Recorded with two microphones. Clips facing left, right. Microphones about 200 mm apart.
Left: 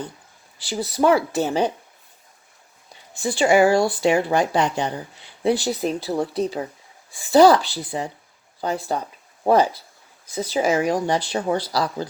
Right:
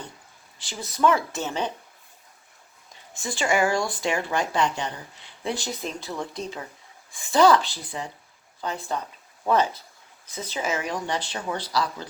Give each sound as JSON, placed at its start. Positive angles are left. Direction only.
{"t": 0.7, "sound": "speech", "side_deg": 35}
{"t": 3.2, "sound": "speech", "side_deg": 35}